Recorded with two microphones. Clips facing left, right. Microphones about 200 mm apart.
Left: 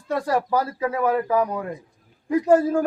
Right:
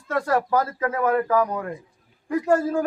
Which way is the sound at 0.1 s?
15° left (ahead or behind).